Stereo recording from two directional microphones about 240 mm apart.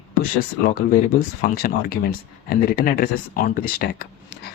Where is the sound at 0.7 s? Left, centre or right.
Left.